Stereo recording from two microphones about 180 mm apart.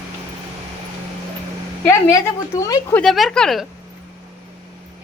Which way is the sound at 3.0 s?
Centre (ahead or behind).